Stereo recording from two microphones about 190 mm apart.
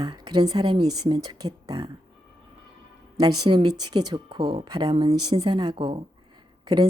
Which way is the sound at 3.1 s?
20° right (ahead or behind).